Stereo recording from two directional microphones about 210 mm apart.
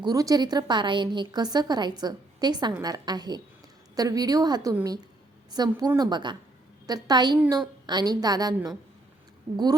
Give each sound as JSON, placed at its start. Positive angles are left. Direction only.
{"t": 0.0, "sound": "a woman's voice", "side_deg": -15}
{"t": 7.3, "sound": "a woman's voice", "side_deg": -10}
{"t": 7.9, "sound": "a woman's voice", "side_deg": -20}